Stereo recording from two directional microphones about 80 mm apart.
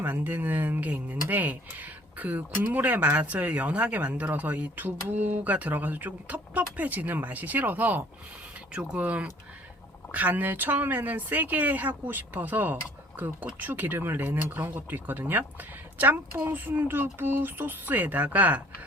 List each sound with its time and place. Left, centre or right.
0.0 s speech: right